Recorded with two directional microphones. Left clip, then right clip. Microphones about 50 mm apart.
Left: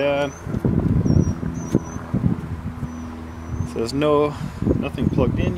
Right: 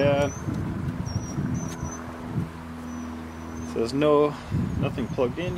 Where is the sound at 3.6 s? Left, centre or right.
Left.